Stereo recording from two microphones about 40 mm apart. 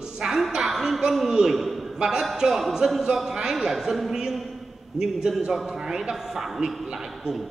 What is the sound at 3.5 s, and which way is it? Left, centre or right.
Speech, centre.